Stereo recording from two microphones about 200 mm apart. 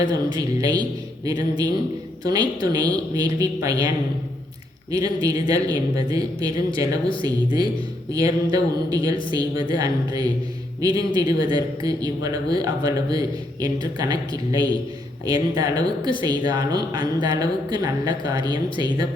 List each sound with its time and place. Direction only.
0.3 s speech: 20° right (ahead or behind)